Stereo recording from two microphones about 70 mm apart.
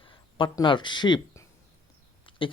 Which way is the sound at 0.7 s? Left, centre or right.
Left.